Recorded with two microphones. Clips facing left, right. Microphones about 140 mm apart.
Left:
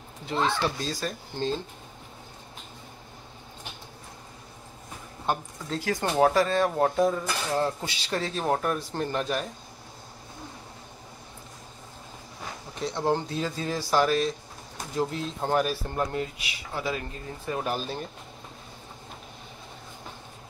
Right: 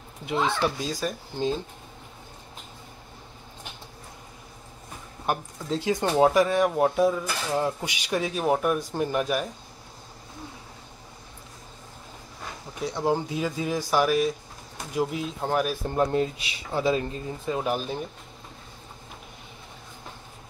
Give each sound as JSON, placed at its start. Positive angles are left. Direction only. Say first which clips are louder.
{"t": 0.3, "sound": "speech", "louder": "right 1 dB", "side_deg": -10}
{"t": 5.7, "sound": "speech", "louder": "right 3 dB", "side_deg": -20}
{"t": 12.8, "sound": "speech", "louder": "right 1 dB", "side_deg": -10}
{"t": 15.7, "sound": "speech", "louder": "right 5 dB", "side_deg": -20}